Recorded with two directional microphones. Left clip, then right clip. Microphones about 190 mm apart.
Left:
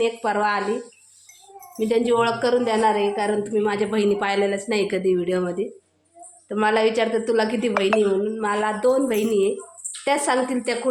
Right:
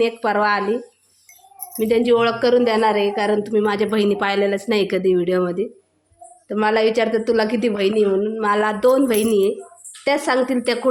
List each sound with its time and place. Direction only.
0.0 s speech: 30° right (ahead or behind)
1.8 s a woman's voice: 25° right (ahead or behind)